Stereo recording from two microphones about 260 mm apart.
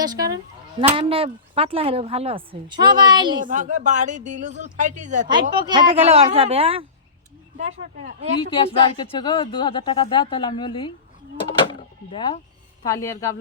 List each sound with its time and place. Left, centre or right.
0.0 s sheep: centre
0.9 s speech: right
3.4 s speech: right
5.3 s speech: centre
8.4 s a woman's voice: centre
11.7 s door: centre
12.8 s speech: centre